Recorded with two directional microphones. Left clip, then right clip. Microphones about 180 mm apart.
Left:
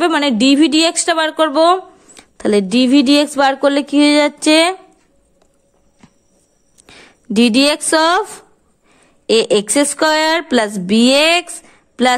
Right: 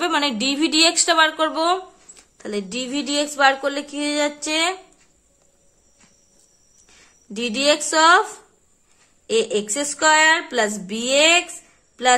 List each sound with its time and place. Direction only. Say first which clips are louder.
0.0 s speech: left 7 dB; 35° left (ahead or behind); by 4.7 s 50° left (ahead or behind)
6.9 s a sound: left 12 dB; 50° left (ahead or behind)
7.3 s speech: left 6 dB; 55° left (ahead or behind)
9.2 s speech: left 8 dB; 55° left (ahead or behind)